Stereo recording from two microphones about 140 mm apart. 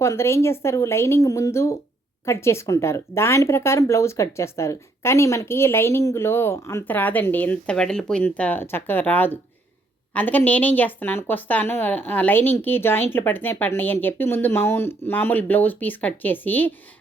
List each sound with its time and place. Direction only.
0.0 s speech: 20° left (ahead or behind)